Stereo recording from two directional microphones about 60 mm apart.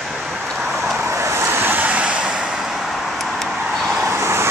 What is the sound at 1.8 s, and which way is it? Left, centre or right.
Vehicle, right.